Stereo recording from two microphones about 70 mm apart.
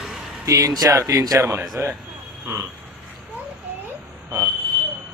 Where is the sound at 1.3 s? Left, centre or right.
Right.